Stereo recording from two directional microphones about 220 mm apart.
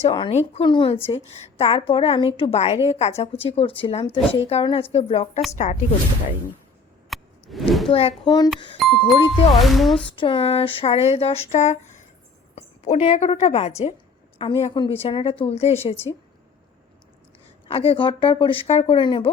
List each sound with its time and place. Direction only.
0.0 s a woman's voice: 25° left (ahead or behind)
7.1 s a sound: centre (ahead or behind)
7.9 s a woman's voice: 25° left (ahead or behind)
8.8 s speech: centre (ahead or behind)
10.2 s a woman's voice: 25° left (ahead or behind)
17.7 s a woman's voice: 25° left (ahead or behind)